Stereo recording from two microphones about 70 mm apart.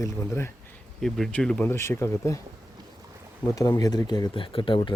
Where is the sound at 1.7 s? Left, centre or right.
Left.